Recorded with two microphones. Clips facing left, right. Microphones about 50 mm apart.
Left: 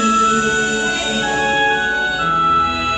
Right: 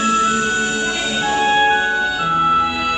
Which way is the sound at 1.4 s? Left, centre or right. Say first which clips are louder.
Right 2 dB; centre.